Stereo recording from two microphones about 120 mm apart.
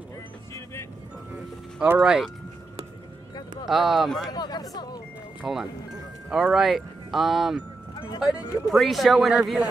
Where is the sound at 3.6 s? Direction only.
5° right (ahead or behind).